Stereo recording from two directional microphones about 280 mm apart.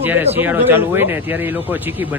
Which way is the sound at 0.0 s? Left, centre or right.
Centre.